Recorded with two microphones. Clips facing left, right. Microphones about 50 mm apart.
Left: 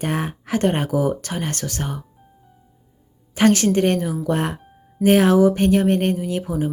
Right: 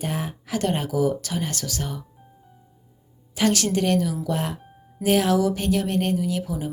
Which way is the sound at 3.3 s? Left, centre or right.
Left.